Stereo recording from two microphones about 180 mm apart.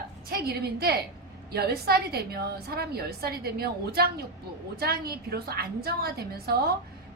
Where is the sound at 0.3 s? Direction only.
60° right (ahead or behind).